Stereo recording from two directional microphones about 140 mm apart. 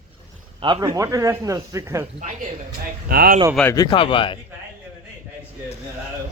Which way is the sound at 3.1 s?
90° right.